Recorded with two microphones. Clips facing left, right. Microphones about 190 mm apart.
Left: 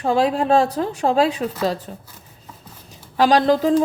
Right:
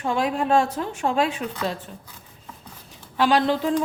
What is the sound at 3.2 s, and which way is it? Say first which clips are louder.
Speech: left 5 dB; 40° left (ahead or behind).